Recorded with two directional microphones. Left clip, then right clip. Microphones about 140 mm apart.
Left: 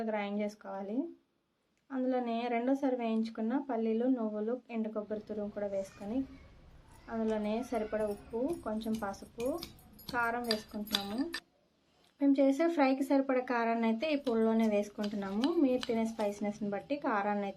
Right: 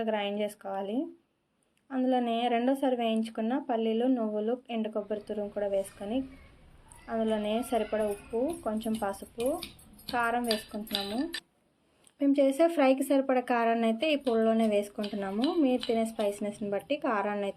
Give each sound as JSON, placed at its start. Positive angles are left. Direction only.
{"t": 0.0, "sound": "speech", "side_deg": -20}
{"t": 7.1, "sound": "speech", "side_deg": -20}
{"t": 10.4, "sound": "speech", "side_deg": -10}
{"t": 12.2, "sound": "speech", "side_deg": -20}